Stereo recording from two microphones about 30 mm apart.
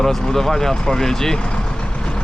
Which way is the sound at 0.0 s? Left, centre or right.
Centre.